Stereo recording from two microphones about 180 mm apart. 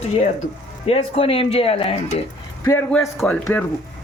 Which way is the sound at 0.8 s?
30° left (ahead or behind).